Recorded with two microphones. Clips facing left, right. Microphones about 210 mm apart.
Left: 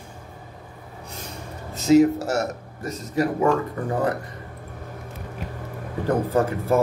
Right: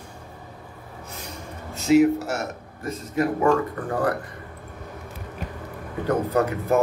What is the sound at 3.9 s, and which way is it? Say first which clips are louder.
Speech: left 1 dB; 20° left (ahead or behind).